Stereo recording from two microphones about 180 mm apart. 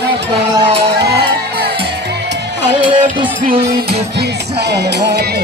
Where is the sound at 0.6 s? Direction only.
35° right (ahead or behind).